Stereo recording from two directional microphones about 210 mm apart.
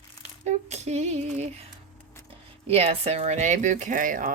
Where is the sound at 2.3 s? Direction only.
30° right (ahead or behind).